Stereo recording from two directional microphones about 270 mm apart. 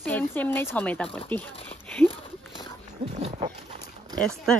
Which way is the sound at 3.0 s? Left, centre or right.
Centre.